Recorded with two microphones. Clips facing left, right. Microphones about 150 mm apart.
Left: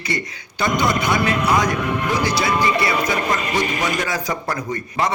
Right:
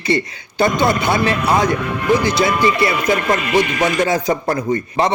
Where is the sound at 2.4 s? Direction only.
25° left (ahead or behind).